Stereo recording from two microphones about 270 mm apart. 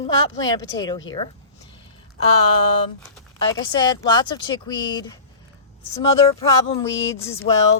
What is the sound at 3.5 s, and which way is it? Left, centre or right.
Speech, centre.